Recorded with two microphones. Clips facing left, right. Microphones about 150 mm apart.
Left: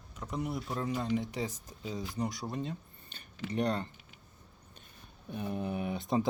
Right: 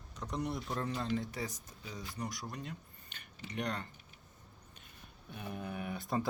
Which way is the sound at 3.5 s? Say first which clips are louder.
Left 7 dB; 35° left (ahead or behind).